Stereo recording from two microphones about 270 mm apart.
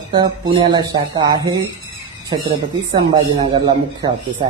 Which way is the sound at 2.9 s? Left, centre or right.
Centre.